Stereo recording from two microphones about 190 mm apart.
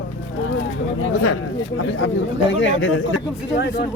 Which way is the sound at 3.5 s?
60° left (ahead or behind).